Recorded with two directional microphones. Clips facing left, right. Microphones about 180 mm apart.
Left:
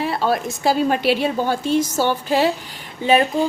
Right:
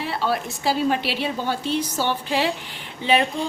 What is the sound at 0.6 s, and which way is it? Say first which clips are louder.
A woman's voice: left 4 dB; 45° left (ahead or behind).